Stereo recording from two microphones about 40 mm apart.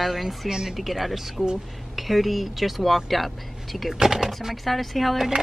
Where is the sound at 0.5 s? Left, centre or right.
Centre.